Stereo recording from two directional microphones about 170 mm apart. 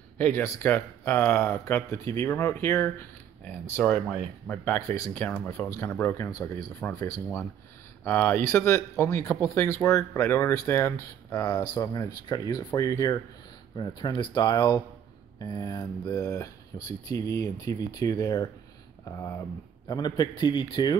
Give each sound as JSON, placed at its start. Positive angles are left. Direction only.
{"t": 0.2, "sound": "speech", "side_deg": 15}